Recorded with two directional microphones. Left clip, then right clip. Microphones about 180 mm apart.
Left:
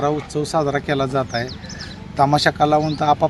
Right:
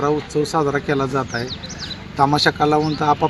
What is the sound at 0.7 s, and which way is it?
Speech, 35° left (ahead or behind).